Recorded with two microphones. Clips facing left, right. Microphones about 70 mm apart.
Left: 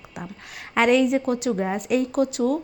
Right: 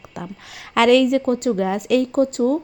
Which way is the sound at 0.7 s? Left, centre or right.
Right.